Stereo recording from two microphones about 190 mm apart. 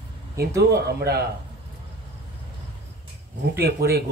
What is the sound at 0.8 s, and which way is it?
Speech, 60° right (ahead or behind).